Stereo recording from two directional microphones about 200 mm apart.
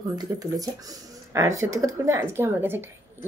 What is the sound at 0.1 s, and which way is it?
Speech, 20° right (ahead or behind).